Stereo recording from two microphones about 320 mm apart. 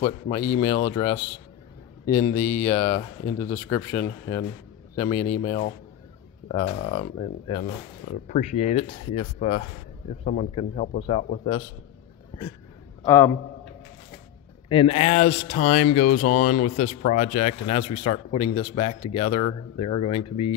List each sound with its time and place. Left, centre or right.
0.8 s a man's voice: centre
13.0 s speech: centre
14.7 s speech: centre